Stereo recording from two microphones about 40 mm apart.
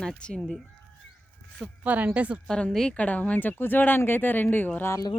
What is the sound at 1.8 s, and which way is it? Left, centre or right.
Speech, right.